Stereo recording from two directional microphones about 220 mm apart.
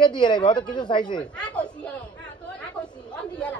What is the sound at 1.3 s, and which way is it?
Chatter, 5° left (ahead or behind).